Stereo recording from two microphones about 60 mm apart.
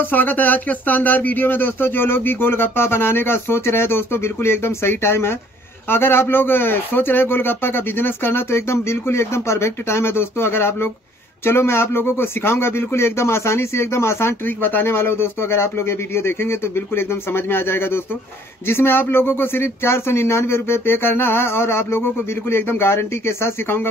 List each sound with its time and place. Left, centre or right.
0.0 s speech: left